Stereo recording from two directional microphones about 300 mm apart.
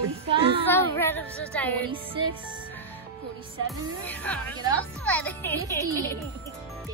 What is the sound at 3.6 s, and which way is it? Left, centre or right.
A woman's voice, centre.